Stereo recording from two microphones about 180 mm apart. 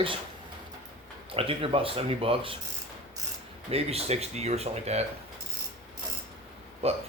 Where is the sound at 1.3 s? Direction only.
30° right (ahead or behind).